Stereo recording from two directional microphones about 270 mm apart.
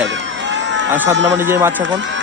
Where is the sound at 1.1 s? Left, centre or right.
Right.